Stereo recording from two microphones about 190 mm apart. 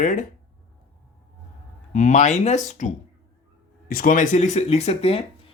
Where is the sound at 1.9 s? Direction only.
40° left (ahead or behind).